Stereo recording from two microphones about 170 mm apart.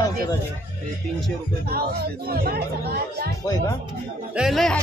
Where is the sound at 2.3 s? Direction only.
65° right (ahead or behind).